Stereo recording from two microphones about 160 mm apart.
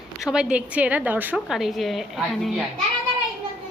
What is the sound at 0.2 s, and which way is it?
A woman's voice, 5° right (ahead or behind).